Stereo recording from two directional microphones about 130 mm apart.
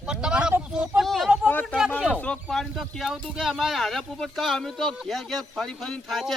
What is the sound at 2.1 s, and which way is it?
Speech, 10° left (ahead or behind).